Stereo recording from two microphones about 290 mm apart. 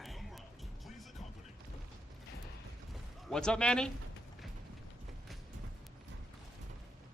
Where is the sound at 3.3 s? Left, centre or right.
Centre.